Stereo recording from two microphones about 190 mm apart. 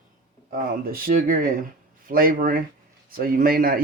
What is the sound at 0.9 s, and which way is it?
Speech, 50° right (ahead or behind).